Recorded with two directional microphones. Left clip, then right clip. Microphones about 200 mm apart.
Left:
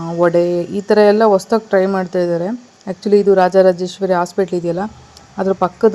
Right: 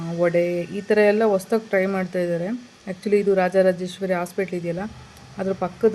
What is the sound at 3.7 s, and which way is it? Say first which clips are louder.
Speech: left 8 dB; 20° left (ahead or behind).